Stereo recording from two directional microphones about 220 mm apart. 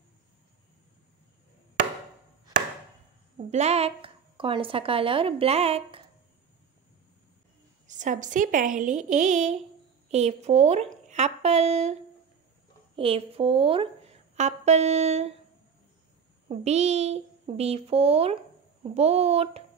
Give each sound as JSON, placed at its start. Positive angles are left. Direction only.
{"t": 3.4, "sound": "a woman's voice", "side_deg": -30}
{"t": 7.8, "sound": "a woman's voice", "side_deg": -35}
{"t": 16.4, "sound": "a woman's voice", "side_deg": -30}